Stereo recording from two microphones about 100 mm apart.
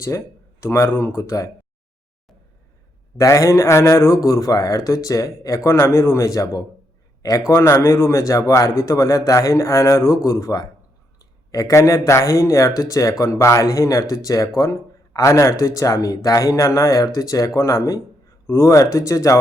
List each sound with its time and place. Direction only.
0.6 s speech: 30° left (ahead or behind)
3.2 s speech: 35° left (ahead or behind)